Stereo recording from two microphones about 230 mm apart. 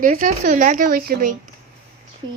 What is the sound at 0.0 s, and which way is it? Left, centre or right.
Speech, right.